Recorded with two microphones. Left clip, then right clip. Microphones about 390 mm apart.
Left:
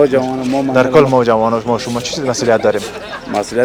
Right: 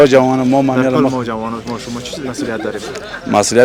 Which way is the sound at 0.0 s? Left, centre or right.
Right.